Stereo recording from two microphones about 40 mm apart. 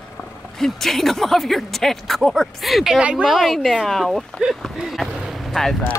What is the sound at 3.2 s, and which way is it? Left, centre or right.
Speech, centre.